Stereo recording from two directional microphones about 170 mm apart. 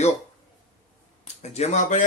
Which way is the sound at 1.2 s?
40° left (ahead or behind).